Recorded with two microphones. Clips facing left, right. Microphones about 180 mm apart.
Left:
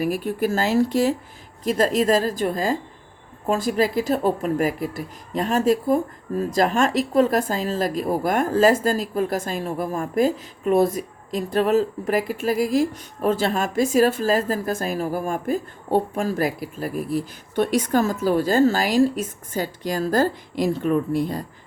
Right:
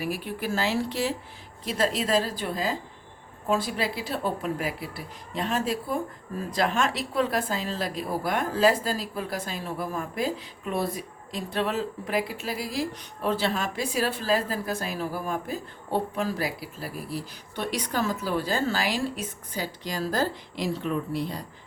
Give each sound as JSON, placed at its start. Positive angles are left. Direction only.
{"t": 0.0, "sound": "a woman's voice", "side_deg": 45}